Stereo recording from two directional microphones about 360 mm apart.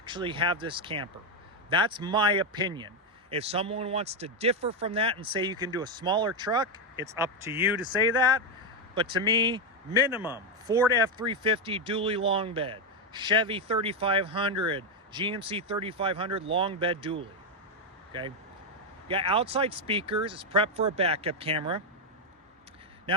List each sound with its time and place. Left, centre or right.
0.0 s speech: centre
9.0 s a man's voice: centre